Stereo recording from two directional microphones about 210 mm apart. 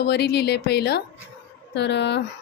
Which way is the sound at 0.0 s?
50° left (ahead or behind).